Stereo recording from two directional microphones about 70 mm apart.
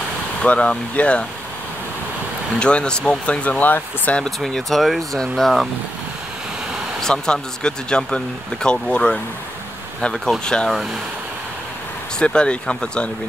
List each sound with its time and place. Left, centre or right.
0.4 s speech: centre
2.6 s speech: centre
4.2 s speech: centre
7.0 s speech: centre
12.2 s speech: centre